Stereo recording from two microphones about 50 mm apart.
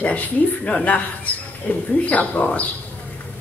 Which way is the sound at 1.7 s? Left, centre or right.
Left.